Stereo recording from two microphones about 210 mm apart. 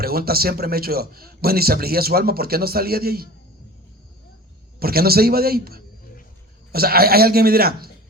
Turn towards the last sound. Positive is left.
turn(degrees=-45)  # may be behind; listen again after turning